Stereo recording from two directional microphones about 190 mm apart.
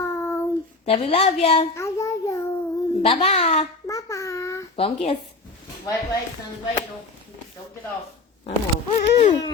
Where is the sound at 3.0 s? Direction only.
35° left (ahead or behind).